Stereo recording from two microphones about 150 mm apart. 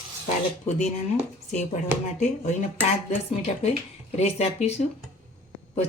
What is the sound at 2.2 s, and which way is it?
Speech, 55° left (ahead or behind).